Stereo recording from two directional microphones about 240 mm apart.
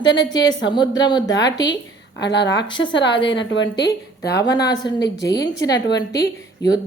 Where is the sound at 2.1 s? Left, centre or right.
Left.